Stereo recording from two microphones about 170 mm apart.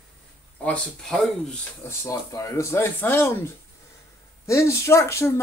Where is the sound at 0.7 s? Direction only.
5° left (ahead or behind).